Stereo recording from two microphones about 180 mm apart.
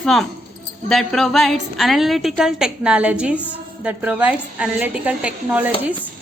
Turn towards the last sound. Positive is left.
turn(degrees=-5)  # may be behind; listen again after turning